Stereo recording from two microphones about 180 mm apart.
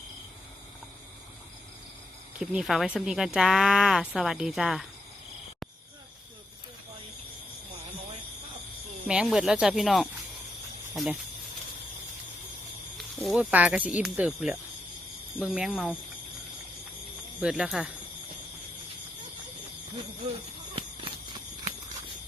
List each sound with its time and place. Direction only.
2.4 s speech: centre (ahead or behind)
9.0 s speech: 5° right (ahead or behind)
13.0 s speech: centre (ahead or behind)
17.4 s speech: 5° right (ahead or behind)
20.7 s a sound: 30° right (ahead or behind)